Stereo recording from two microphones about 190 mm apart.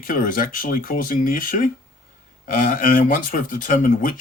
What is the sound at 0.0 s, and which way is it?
Speech, 45° left (ahead or behind).